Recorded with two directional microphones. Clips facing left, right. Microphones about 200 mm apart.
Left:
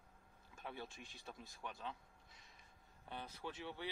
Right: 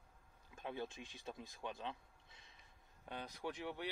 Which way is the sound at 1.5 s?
20° right (ahead or behind).